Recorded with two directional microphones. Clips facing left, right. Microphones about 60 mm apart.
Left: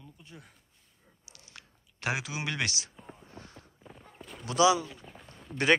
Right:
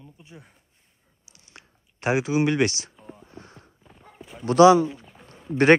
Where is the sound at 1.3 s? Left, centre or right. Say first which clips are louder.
Right 2 dB; right.